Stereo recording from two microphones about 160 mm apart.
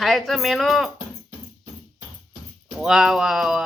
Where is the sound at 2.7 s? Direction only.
Centre (ahead or behind).